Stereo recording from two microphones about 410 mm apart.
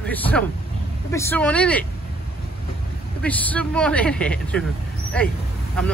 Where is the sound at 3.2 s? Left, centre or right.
Centre.